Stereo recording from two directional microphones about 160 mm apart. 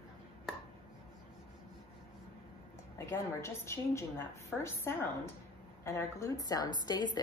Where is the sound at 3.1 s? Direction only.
15° left (ahead or behind).